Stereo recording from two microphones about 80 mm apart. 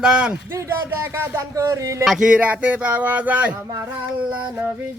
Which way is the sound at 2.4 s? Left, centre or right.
Centre.